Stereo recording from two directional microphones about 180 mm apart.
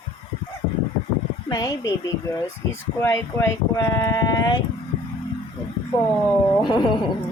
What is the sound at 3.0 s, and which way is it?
Speech, 15° left (ahead or behind).